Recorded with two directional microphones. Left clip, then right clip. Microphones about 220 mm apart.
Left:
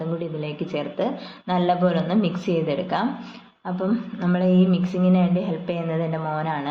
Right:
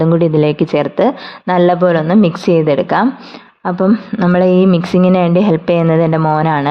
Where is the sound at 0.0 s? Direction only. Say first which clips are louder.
Right 17 dB; 50° right (ahead or behind).